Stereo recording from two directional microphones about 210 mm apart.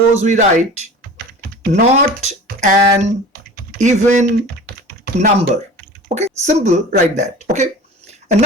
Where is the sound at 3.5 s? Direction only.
35° right (ahead or behind).